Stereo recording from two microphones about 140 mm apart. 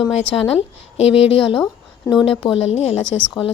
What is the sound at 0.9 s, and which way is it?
Speech, 40° left (ahead or behind).